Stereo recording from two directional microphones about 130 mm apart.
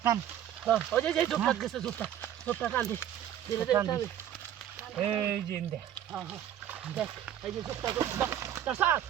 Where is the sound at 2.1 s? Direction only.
15° left (ahead or behind).